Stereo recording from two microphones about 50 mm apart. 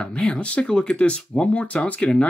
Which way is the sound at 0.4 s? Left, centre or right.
Centre.